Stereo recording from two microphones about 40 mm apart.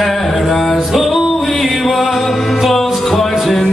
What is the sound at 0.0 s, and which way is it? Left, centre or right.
Music, centre.